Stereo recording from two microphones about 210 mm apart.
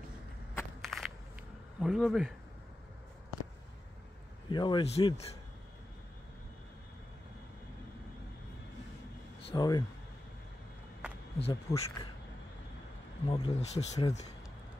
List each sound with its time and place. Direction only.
0.6 s walk: centre (ahead or behind)
1.8 s speech: centre (ahead or behind)
4.5 s speech: 20° left (ahead or behind)
9.5 s speech: 20° left (ahead or behind)
11.3 s speech: 30° left (ahead or behind)
13.3 s speech: 30° left (ahead or behind)